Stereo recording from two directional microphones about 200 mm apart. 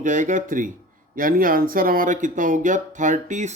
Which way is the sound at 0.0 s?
40° right (ahead or behind).